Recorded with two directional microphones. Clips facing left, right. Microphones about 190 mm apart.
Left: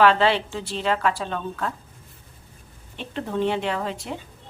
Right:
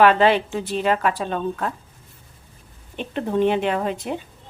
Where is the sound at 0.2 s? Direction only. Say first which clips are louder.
Right 4 dB; 15° right (ahead or behind).